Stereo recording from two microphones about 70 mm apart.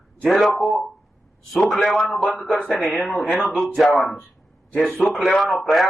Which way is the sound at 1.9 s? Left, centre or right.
Centre.